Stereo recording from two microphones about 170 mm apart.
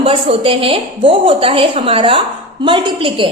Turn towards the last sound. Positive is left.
turn(degrees=-30)  # may be behind; listen again after turning